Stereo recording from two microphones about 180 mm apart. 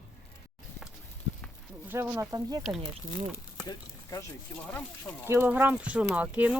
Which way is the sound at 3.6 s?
20° left (ahead or behind).